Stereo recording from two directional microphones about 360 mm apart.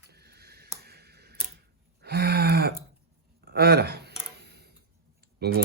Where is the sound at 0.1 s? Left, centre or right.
Right.